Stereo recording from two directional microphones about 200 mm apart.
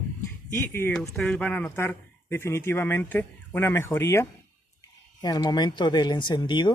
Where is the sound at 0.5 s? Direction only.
10° left (ahead or behind).